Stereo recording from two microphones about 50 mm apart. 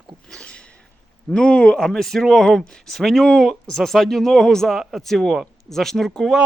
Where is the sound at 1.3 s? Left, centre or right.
Left.